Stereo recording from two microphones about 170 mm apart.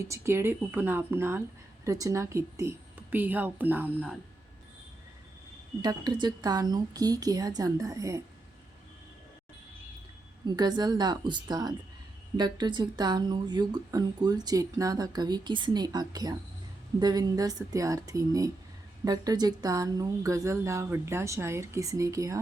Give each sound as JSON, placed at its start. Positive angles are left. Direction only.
{"t": 0.0, "sound": "a woman's voice", "side_deg": -15}
{"t": 5.8, "sound": "speech", "side_deg": -25}
{"t": 10.5, "sound": "a woman's voice", "side_deg": -25}